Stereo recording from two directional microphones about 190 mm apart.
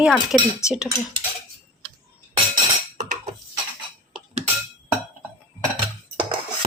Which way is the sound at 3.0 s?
40° right (ahead or behind).